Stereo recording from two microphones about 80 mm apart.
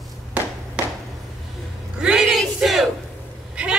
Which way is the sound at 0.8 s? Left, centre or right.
Centre.